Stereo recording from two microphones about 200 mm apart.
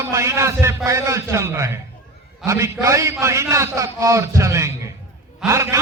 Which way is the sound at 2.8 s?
15° right (ahead or behind).